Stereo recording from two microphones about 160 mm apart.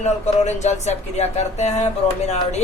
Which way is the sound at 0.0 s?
45° left (ahead or behind).